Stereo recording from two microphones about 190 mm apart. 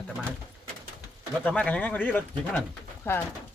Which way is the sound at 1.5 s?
5° left (ahead or behind).